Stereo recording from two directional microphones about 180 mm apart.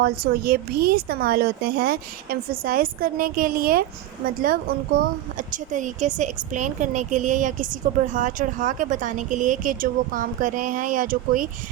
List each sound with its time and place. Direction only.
0.0 s speech: 55° right (ahead or behind)
4.9 s a woman's voice: 45° right (ahead or behind)